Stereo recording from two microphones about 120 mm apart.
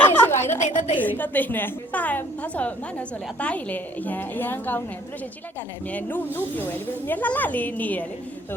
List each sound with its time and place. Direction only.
0.0 s a woman's voice: 20° left (ahead or behind)
0.6 s a woman's voice: 85° left
0.9 s speech: 15° left (ahead or behind)
5.9 s speech: 15° left (ahead or behind)